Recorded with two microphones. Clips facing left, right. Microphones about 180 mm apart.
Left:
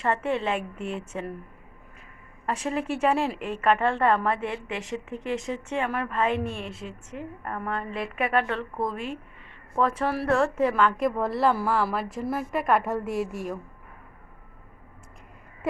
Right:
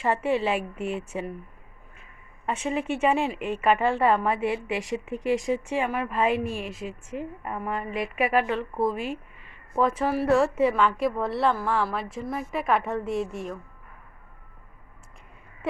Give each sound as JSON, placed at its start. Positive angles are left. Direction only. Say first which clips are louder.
{"t": 0.0, "sound": "a woman's voice", "louder": "right 2 dB", "side_deg": -5}
{"t": 2.5, "sound": "a woman's voice", "louder": "right 1 dB", "side_deg": 0}